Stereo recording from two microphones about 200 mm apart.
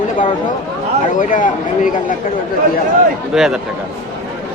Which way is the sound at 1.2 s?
40° left (ahead or behind).